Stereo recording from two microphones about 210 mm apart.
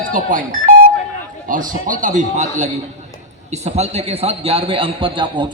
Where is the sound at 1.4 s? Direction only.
40° right (ahead or behind); by 5.5 s 25° right (ahead or behind).